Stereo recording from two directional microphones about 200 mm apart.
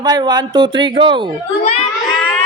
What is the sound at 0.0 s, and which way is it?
A man's voice, 20° right (ahead or behind).